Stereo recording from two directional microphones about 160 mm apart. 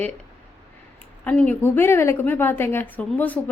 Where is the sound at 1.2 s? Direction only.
10° left (ahead or behind).